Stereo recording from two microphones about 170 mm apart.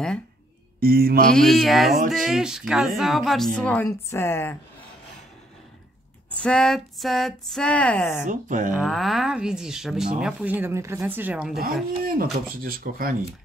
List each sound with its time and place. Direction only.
0.7 s mantra: 65° right (ahead or behind)
1.3 s speech: centre (ahead or behind)
6.4 s speech: 5° left (ahead or behind)
8.3 s speech: 50° right (ahead or behind)
8.7 s speech: centre (ahead or behind)
11.6 s speech: 60° right (ahead or behind)